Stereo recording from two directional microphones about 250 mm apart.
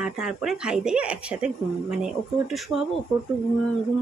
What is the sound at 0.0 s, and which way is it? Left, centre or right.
Speech, centre.